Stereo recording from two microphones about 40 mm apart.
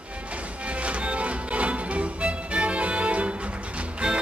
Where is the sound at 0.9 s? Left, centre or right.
Right.